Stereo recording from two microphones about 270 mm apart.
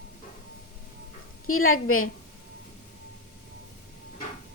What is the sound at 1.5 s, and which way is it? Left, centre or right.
Speech, left.